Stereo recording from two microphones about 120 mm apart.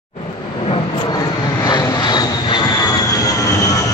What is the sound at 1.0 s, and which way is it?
Vehicle, 35° left (ahead or behind).